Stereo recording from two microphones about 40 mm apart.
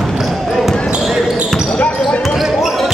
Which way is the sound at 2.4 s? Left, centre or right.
Centre.